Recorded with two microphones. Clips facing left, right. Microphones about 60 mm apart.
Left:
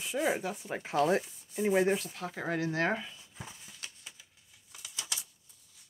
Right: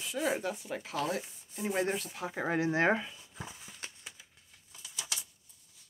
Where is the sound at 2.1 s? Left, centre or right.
Centre.